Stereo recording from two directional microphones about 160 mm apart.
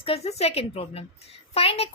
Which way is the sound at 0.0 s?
40° left (ahead or behind).